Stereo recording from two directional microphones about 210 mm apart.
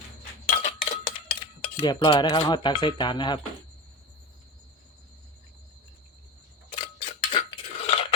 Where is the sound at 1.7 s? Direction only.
20° left (ahead or behind).